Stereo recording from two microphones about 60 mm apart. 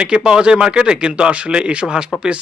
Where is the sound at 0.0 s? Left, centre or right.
Centre.